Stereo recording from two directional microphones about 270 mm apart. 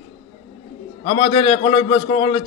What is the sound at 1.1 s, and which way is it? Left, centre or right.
A man's voice, centre.